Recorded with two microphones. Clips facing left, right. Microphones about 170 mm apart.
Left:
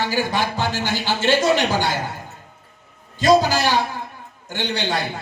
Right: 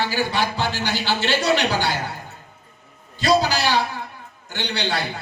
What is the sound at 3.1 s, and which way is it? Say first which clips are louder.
A man's voice: left 3 dB; 45° left (ahead or behind).